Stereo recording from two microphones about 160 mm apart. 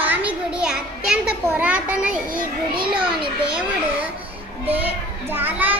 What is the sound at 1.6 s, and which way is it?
Speech, 5° right (ahead or behind).